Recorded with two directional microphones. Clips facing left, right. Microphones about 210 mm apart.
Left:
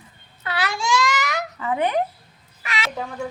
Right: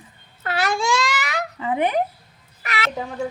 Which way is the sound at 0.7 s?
55° right (ahead or behind).